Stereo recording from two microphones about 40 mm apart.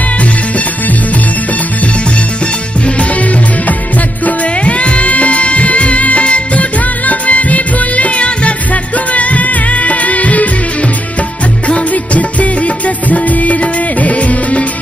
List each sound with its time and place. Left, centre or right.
3.0 s music: left
11.9 s music: left